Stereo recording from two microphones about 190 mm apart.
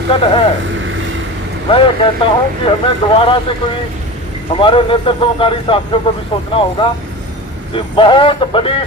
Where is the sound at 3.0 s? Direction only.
25° left (ahead or behind).